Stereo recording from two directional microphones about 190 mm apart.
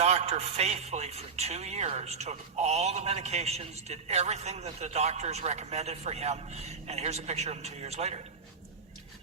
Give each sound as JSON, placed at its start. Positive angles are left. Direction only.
{"t": 0.0, "sound": "a man's voice", "side_deg": -35}